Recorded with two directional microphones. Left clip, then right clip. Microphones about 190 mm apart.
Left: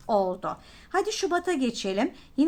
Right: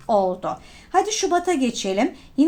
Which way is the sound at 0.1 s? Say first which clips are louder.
Right 5 dB; 15° left (ahead or behind).